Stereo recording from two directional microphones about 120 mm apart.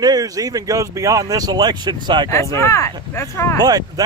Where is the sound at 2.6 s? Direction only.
25° left (ahead or behind).